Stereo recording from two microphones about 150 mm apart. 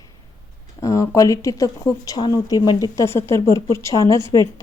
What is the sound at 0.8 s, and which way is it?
Speech, 20° left (ahead or behind).